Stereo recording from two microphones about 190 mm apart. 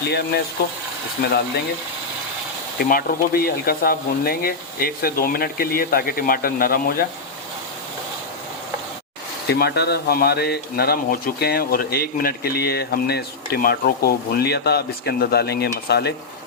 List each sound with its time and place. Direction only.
0.0 s speech: 60° left (ahead or behind)
2.7 s speech: 50° left (ahead or behind)
9.5 s speech: 60° left (ahead or behind)